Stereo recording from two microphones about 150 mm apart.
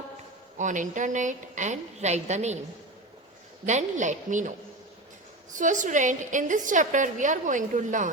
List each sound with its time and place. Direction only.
0.6 s a woman's voice: 60° right (ahead or behind)
3.7 s a woman's voice: 55° right (ahead or behind)
5.5 s a woman's voice: 60° right (ahead or behind)